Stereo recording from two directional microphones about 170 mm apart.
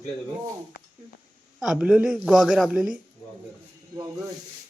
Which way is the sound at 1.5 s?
5° right (ahead or behind).